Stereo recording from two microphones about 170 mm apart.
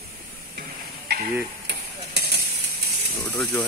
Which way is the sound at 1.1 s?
75° right (ahead or behind).